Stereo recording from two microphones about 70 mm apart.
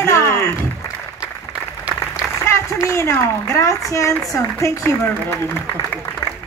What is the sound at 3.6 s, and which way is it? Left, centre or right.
Speech, left.